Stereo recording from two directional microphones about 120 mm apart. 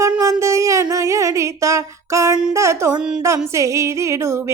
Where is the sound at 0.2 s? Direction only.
25° right (ahead or behind).